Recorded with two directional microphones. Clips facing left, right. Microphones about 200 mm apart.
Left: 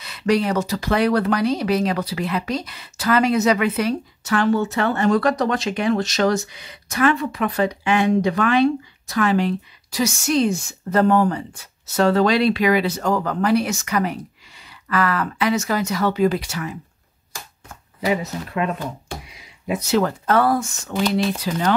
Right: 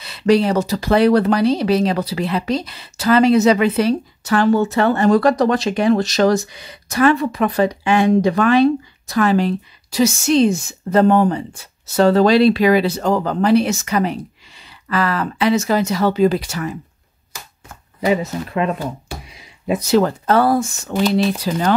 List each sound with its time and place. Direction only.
0.0 s speech: 30° right (ahead or behind)
18.0 s speech: 30° right (ahead or behind)
19.7 s speech: 35° right (ahead or behind)